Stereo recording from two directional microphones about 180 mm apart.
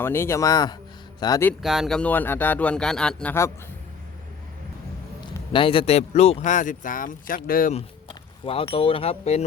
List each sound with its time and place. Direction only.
0.0 s speech: 15° left (ahead or behind)
1.6 s speech: centre (ahead or behind)
5.5 s speech: 30° left (ahead or behind); by 7.7 s 50° left (ahead or behind)
7.7 s a sound: 35° left (ahead or behind)
8.7 s speech: 30° left (ahead or behind)